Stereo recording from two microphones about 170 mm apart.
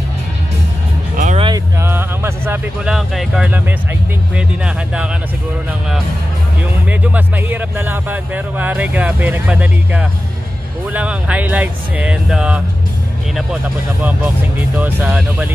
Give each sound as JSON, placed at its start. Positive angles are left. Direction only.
{"t": 1.1, "sound": "music", "side_deg": -45}
{"t": 1.8, "sound": "speech", "side_deg": -15}
{"t": 6.9, "sound": "speech", "side_deg": -10}
{"t": 14.8, "sound": "speech", "side_deg": -10}